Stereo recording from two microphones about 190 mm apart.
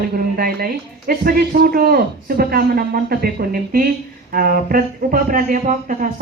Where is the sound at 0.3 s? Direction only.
50° right (ahead or behind).